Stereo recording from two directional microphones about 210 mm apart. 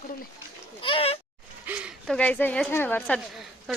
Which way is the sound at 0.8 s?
25° left (ahead or behind).